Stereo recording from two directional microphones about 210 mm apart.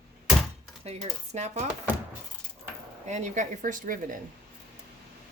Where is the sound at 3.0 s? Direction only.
35° right (ahead or behind).